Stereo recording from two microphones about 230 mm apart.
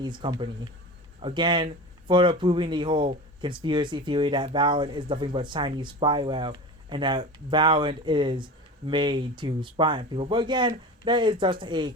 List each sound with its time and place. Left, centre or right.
0.0 s speech: centre